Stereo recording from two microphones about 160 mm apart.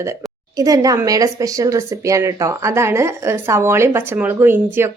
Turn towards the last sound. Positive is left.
turn(degrees=-15)  # may be behind; listen again after turning